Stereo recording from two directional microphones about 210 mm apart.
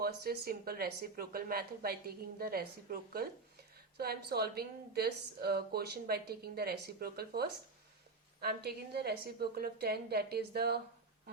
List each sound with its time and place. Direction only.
0.0 s a woman's voice: 45° right (ahead or behind)